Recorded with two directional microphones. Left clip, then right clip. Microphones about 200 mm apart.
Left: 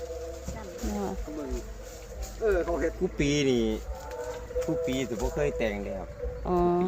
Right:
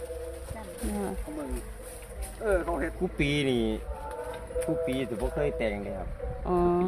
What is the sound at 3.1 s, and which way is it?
Speech, 25° right (ahead or behind).